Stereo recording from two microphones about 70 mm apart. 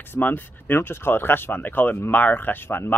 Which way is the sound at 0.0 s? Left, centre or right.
Left.